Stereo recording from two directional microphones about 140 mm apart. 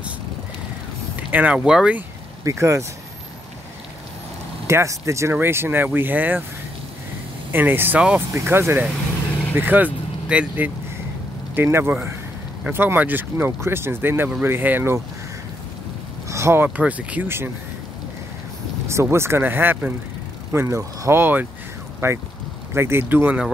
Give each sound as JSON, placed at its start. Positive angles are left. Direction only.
{"t": 1.3, "sound": "speech", "side_deg": -10}
{"t": 2.4, "sound": "speech", "side_deg": -20}
{"t": 4.6, "sound": "speech", "side_deg": -20}
{"t": 7.5, "sound": "speech", "side_deg": -15}
{"t": 16.3, "sound": "speech", "side_deg": -20}
{"t": 18.9, "sound": "speech", "side_deg": -20}